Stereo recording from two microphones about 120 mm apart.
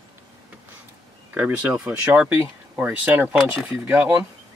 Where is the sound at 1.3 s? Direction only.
15° right (ahead or behind).